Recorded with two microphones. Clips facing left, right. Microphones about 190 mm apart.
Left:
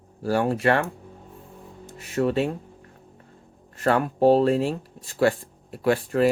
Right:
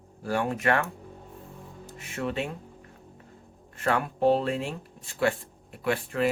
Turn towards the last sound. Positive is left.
turn(degrees=40)  # may be behind; listen again after turning